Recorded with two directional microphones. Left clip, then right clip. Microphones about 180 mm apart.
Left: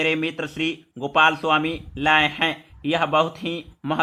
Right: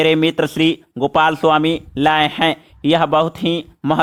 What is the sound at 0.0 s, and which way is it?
Speech, 50° right (ahead or behind).